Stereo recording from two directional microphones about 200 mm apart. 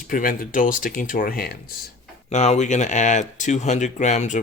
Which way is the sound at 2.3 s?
35° left (ahead or behind).